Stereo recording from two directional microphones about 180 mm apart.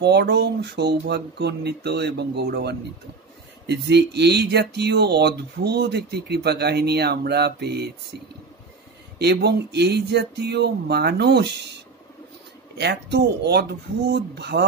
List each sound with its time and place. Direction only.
0.0 s speech: 65° right (ahead or behind)
9.2 s speech: 65° right (ahead or behind)
12.7 s speech: 70° right (ahead or behind)